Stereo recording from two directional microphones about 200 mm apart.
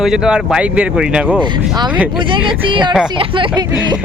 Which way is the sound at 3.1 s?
25° right (ahead or behind).